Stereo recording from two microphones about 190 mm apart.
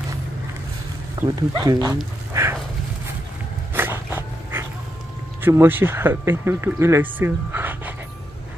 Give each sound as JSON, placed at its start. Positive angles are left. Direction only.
{"t": 1.2, "sound": "speech", "side_deg": -20}
{"t": 3.7, "sound": "dog", "side_deg": -10}
{"t": 5.4, "sound": "speech", "side_deg": -10}